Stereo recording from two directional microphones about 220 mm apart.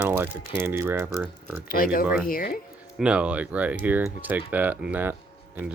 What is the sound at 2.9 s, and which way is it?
Speech, 5° right (ahead or behind).